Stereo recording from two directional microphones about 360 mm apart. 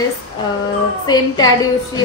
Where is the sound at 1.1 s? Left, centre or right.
Centre.